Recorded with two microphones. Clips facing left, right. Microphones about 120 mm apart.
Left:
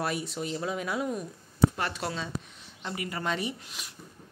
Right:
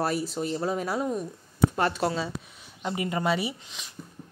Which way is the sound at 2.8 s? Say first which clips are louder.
Right 6 dB; 20° right (ahead or behind).